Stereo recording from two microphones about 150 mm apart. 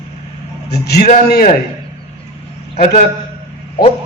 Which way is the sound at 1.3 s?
70° left (ahead or behind).